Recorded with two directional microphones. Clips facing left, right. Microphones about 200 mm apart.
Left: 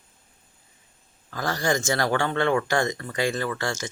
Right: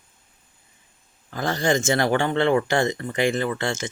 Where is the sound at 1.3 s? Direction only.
25° right (ahead or behind).